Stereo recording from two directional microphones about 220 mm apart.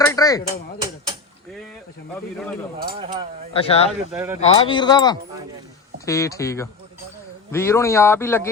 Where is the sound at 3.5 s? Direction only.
25° left (ahead or behind).